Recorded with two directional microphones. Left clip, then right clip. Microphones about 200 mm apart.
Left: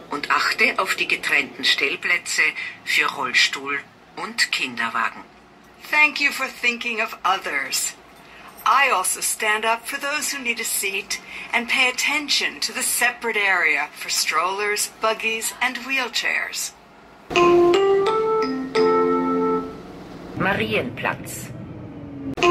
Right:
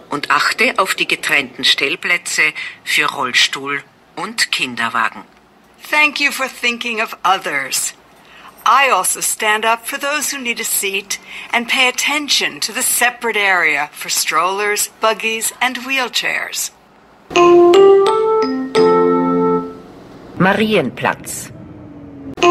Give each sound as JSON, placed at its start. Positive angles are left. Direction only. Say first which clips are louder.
{"t": 0.1, "sound": "speech", "louder": "right 6 dB", "side_deg": -60}
{"t": 17.3, "sound": "music", "louder": "right 7 dB", "side_deg": -65}
{"t": 20.3, "sound": "a man's voice", "louder": "right 8 dB", "side_deg": -60}